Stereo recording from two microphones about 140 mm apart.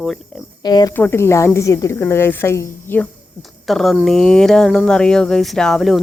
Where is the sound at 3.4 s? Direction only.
Centre (ahead or behind).